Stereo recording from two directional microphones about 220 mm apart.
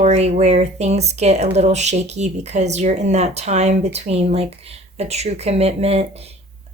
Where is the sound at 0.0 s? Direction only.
30° right (ahead or behind).